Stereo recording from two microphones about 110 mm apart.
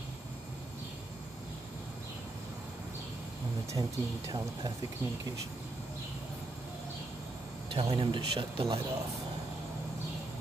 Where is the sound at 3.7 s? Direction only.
35° right (ahead or behind).